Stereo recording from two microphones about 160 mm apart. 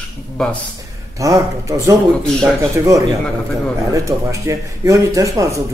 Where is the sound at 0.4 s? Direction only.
Centre (ahead or behind).